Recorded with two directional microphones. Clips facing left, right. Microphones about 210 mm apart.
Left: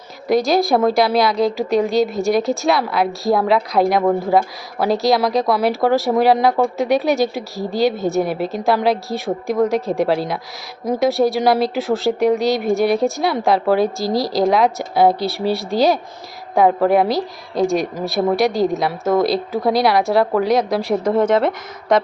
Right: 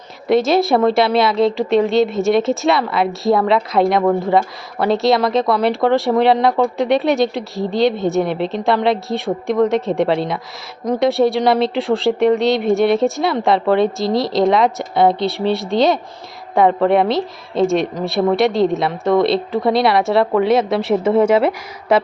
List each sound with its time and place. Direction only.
0.3 s a woman's voice: centre (ahead or behind)